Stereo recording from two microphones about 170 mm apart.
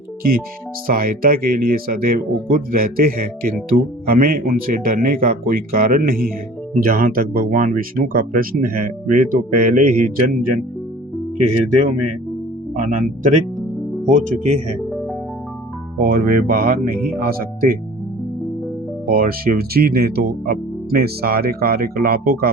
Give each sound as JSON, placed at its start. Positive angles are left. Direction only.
{"t": 0.9, "sound": "speech", "side_deg": -55}
{"t": 12.7, "sound": "speech", "side_deg": -50}
{"t": 16.0, "sound": "speech", "side_deg": -60}
{"t": 19.0, "sound": "speech", "side_deg": -60}